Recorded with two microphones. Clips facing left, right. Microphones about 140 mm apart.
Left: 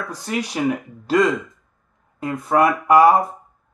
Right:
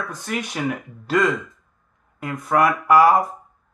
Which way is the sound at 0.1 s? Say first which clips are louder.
Left 3 dB; 35° left (ahead or behind).